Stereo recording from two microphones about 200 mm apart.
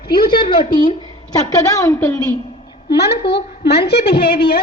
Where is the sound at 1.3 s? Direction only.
15° left (ahead or behind).